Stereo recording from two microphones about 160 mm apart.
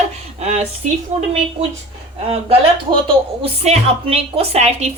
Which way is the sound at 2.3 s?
35° right (ahead or behind).